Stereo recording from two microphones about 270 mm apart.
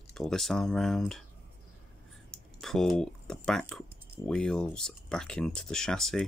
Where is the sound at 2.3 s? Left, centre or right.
Centre.